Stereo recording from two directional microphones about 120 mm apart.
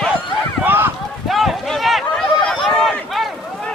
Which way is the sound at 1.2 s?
Centre (ahead or behind).